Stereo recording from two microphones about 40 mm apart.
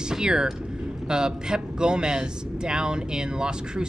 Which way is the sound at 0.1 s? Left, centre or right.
Centre.